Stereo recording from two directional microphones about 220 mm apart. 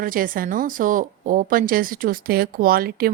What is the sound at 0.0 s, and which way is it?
A woman's voice, 40° right (ahead or behind).